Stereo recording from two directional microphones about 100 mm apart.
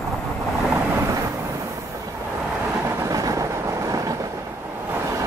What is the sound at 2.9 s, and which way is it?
Train, 30° right (ahead or behind).